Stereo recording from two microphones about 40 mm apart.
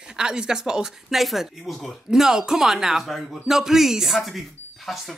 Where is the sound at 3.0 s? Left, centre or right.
Centre.